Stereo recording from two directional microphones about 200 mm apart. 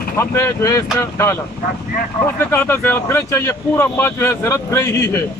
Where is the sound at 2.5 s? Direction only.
10° left (ahead or behind).